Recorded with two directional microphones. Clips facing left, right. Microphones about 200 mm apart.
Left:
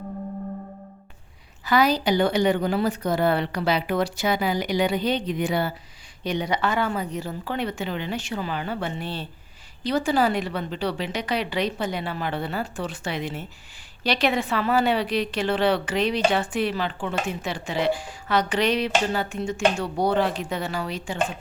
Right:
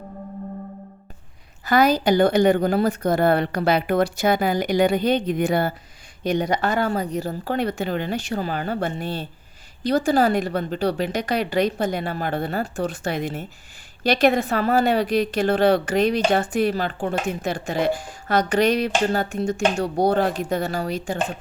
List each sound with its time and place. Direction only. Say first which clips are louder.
1.6 s a woman's voice: right 3 dB; 50° right (ahead or behind)